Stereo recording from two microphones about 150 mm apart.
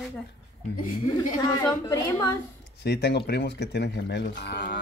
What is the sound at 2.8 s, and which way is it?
Speech, 90° left.